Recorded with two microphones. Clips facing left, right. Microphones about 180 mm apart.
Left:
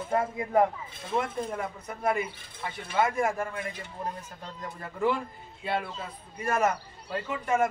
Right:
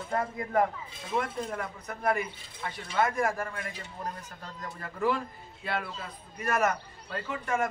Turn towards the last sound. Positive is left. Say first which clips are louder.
# left 4 dB
turn(degrees=20)  # may be behind; listen again after turning